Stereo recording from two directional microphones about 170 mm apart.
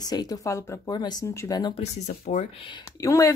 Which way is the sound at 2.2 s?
50° left (ahead or behind).